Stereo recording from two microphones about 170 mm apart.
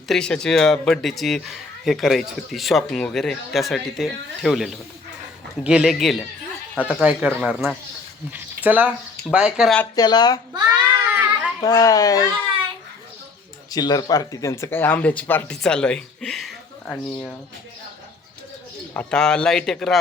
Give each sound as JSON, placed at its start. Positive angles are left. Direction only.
{"t": 0.1, "sound": "a man's voice", "side_deg": 5}
{"t": 9.9, "sound": "speech", "side_deg": 25}
{"t": 11.0, "sound": "a sound", "side_deg": -10}
{"t": 11.6, "sound": "speech", "side_deg": 20}
{"t": 13.7, "sound": "speech", "side_deg": 20}
{"t": 18.9, "sound": "a man's voice", "side_deg": 5}